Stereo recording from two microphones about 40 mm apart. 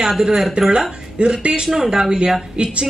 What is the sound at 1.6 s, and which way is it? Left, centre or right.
Speech, centre.